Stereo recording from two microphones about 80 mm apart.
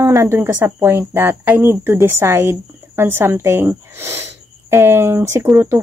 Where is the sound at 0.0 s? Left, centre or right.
Right.